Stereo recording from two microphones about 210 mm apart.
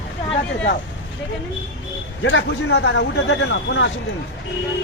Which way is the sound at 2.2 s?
60° left (ahead or behind).